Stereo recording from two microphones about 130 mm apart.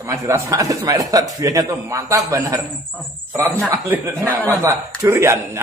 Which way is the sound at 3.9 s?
15° right (ahead or behind).